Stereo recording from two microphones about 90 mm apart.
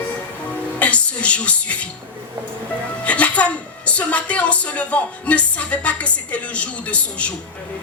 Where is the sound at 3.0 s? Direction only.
15° left (ahead or behind).